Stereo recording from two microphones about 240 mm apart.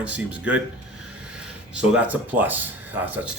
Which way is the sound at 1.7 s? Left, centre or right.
Centre.